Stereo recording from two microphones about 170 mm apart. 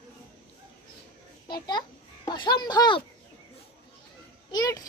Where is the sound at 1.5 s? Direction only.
25° left (ahead or behind).